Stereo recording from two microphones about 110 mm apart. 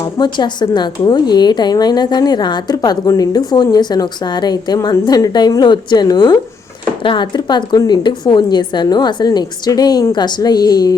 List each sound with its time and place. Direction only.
0.0 s a woman's voice: 45° left (ahead or behind)